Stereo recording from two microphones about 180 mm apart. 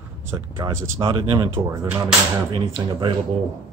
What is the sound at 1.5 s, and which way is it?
Speech, 15° right (ahead or behind).